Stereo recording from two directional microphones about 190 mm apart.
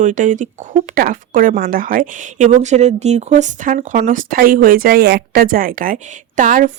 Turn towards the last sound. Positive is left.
turn(degrees=-45)  # may be behind; listen again after turning